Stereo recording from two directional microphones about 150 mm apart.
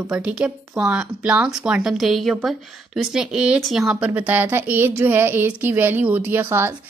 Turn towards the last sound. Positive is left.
turn(degrees=-15)  # may be behind; listen again after turning